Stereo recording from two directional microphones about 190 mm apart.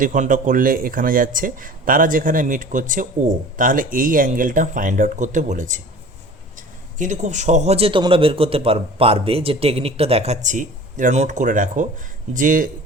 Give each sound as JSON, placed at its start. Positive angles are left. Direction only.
{"t": 0.0, "sound": "a man's voice", "side_deg": -45}
{"t": 7.0, "sound": "a man's voice", "side_deg": -40}